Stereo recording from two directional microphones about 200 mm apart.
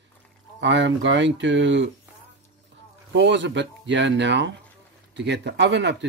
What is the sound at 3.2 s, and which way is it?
Speech, 60° right (ahead or behind).